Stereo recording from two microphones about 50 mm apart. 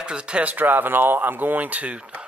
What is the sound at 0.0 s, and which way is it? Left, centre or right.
Speech, right.